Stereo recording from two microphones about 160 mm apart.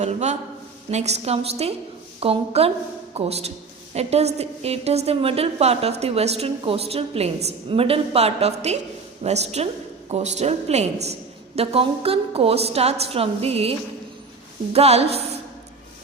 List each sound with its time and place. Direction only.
0.0 s a man's voice: 45° right (ahead or behind)